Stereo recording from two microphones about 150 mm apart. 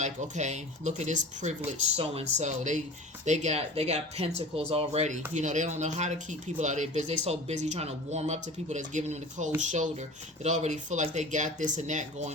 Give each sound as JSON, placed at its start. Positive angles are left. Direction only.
{"t": 0.0, "sound": "speech", "side_deg": -50}